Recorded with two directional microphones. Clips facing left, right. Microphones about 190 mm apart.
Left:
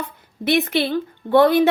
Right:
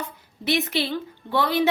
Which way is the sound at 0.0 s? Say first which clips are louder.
Left 5 dB; 55° left (ahead or behind).